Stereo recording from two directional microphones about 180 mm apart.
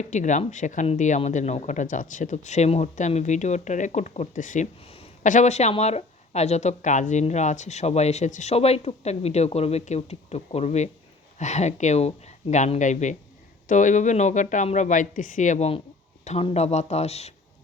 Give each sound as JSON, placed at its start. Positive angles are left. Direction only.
{"t": 0.0, "sound": "speech", "side_deg": 40}